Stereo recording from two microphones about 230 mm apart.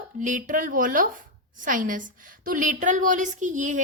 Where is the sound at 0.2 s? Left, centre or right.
Right.